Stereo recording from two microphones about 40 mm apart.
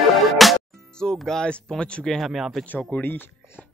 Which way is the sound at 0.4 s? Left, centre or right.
Centre.